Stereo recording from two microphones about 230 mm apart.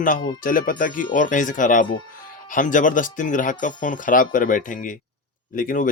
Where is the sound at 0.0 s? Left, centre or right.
Left.